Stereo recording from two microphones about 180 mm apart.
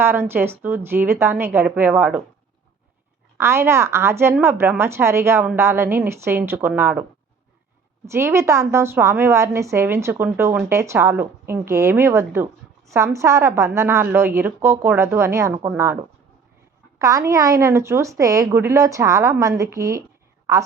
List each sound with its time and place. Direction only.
0.0 s a woman's voice: 15° right (ahead or behind)
3.3 s a woman's voice: 15° right (ahead or behind)
8.0 s a woman's voice: 15° right (ahead or behind)
17.0 s a woman's voice: 20° right (ahead or behind)